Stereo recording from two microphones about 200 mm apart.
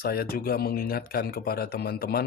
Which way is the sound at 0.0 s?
50° left (ahead or behind).